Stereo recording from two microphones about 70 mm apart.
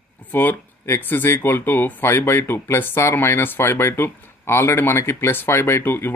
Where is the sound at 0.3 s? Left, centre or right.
Left.